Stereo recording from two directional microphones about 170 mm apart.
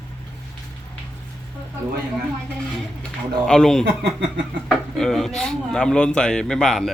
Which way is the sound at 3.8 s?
90° right.